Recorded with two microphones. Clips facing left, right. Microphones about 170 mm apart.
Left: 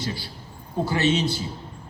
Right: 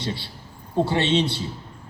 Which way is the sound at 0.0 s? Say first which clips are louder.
Right 1 dB; 25° right (ahead or behind).